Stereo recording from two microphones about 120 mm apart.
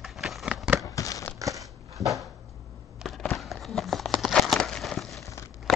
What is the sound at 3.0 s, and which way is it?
Crumpling, centre (ahead or behind).